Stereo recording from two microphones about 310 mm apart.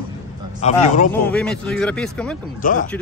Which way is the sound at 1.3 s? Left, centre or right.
Centre.